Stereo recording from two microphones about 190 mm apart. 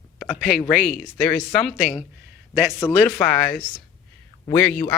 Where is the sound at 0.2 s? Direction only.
Centre (ahead or behind).